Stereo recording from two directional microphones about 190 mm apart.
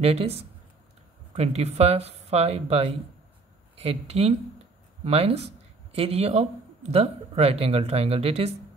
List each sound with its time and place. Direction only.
0.0 s speech: 30° right (ahead or behind)